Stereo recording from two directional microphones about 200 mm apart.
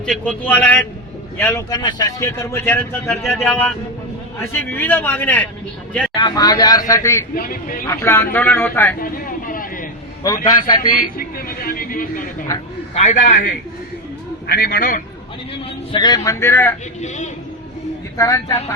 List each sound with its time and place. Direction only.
0.0 s speech: 5° left (ahead or behind)
3.2 s speech: centre (ahead or behind)
6.1 s speech: 20° left (ahead or behind)
7.3 s speech: 45° left (ahead or behind)
7.9 s speech: 10° left (ahead or behind)
9.0 s a sound: 45° left (ahead or behind)
10.2 s speech: 20° left (ahead or behind)
11.2 s a man's voice: 45° left (ahead or behind)
15.9 s speech: 20° left (ahead or behind)
17.0 s a man's voice: 35° left (ahead or behind)
18.2 s speech: 15° left (ahead or behind)